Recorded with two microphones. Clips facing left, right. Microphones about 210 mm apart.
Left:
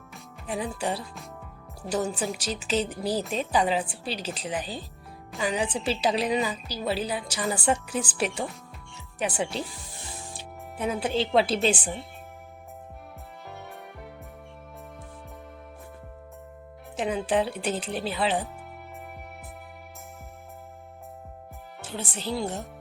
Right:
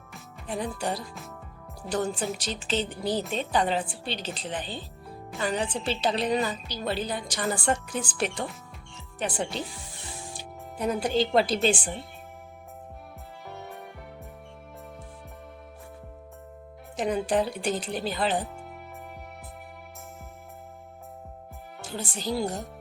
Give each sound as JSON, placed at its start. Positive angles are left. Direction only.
{"t": 0.1, "sound": "music", "side_deg": 5}
{"t": 1.9, "sound": "a woman's voice", "side_deg": 10}
{"t": 3.0, "sound": "a woman's voice", "side_deg": 35}
{"t": 3.2, "sound": "a woman's voice", "side_deg": 5}
{"t": 10.3, "sound": "music", "side_deg": 0}
{"t": 11.5, "sound": "a woman's voice", "side_deg": 5}
{"t": 17.0, "sound": "a woman's voice", "side_deg": 0}
{"t": 21.8, "sound": "speech", "side_deg": 0}